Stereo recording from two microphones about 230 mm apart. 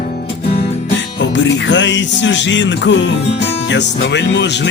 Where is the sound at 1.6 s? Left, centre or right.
Left.